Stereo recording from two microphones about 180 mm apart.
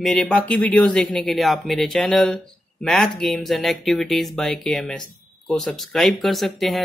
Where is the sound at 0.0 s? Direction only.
5° left (ahead or behind).